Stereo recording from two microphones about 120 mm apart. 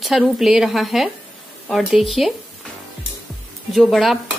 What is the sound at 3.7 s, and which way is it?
Speech, centre (ahead or behind).